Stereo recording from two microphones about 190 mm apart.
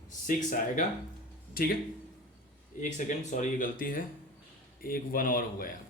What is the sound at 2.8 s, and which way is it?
Speech, 40° left (ahead or behind).